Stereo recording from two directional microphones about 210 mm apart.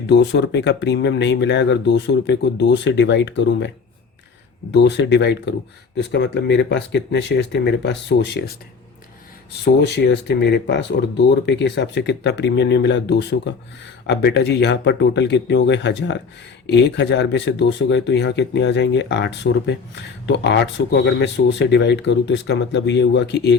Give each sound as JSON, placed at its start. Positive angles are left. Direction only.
{"t": 0.1, "sound": "speech", "side_deg": 55}
{"t": 4.7, "sound": "speech", "side_deg": 55}
{"t": 9.8, "sound": "speech", "side_deg": 55}